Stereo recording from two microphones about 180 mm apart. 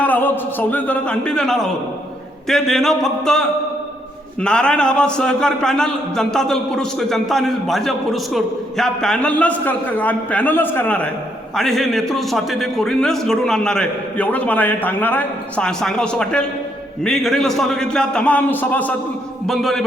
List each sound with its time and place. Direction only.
0.0 s a man's voice: 10° left (ahead or behind)